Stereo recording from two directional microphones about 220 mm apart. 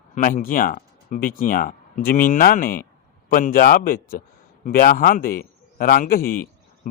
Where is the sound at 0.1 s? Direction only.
35° left (ahead or behind).